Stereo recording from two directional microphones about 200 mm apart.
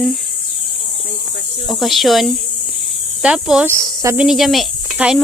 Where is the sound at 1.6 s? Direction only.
Centre (ahead or behind).